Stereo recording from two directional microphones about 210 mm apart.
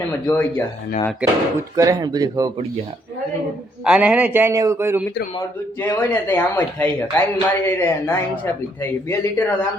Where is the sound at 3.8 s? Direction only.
5° right (ahead or behind).